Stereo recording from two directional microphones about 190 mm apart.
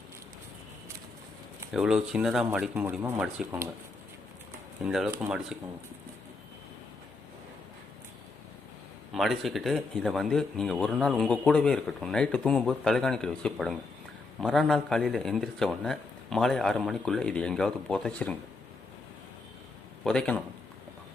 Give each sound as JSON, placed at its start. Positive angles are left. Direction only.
{"t": 1.7, "sound": "speech", "side_deg": -5}
{"t": 4.8, "sound": "speech", "side_deg": 0}
{"t": 9.1, "sound": "speech", "side_deg": 0}
{"t": 20.1, "sound": "speech", "side_deg": 5}